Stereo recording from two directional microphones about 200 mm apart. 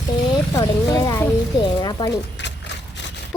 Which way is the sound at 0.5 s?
20° left (ahead or behind).